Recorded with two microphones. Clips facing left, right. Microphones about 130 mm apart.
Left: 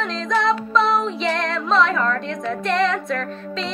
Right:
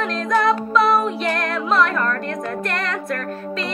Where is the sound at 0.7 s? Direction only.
5° right (ahead or behind).